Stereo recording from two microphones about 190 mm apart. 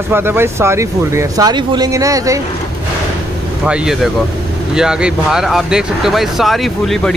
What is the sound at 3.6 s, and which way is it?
Speech, 5° right (ahead or behind).